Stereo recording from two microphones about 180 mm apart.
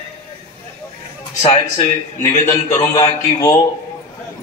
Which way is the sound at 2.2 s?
15° left (ahead or behind).